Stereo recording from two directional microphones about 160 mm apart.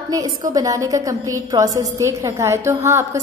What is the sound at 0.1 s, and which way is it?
A woman's voice, 25° right (ahead or behind).